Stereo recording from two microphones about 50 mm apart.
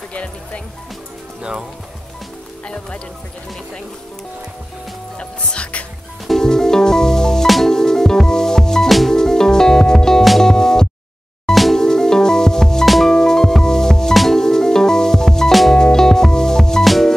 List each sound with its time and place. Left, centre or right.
0.1 s music: left
5.2 s speech: left
6.2 s music: centre
7.4 s music: centre
7.7 s music: centre
10.5 s music: centre
11.5 s music: centre
11.8 s music: centre
12.8 s music: centre
13.1 s music: centre
16.8 s music: centre